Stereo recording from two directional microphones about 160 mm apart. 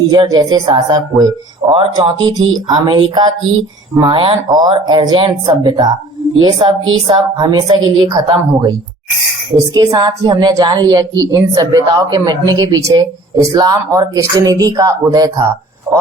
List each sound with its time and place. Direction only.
0.1 s speech: 25° right (ahead or behind)